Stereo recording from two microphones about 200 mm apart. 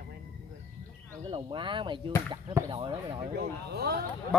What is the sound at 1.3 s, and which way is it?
Speech, 25° right (ahead or behind).